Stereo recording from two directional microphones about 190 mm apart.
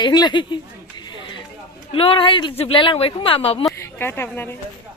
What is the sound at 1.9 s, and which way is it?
A woman's voice, 30° left (ahead or behind).